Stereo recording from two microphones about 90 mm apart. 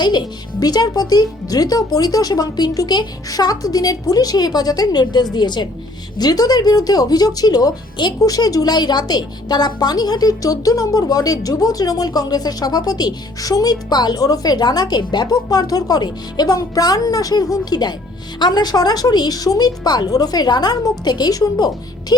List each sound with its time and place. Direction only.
0.0 s a woman's voice: 55° left (ahead or behind)